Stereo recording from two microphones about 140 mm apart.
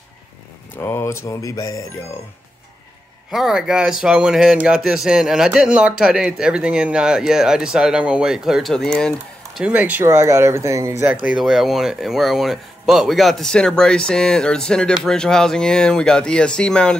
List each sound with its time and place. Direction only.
0.7 s speech: 15° left (ahead or behind)
3.3 s speech: centre (ahead or behind)
9.7 s speech: 10° right (ahead or behind)
11.2 s speech: centre (ahead or behind)